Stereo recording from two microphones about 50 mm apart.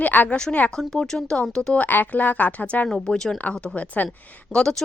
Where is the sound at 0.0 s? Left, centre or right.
Left.